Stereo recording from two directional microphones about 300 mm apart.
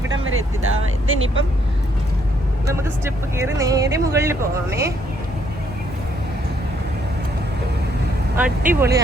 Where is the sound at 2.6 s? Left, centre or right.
Centre.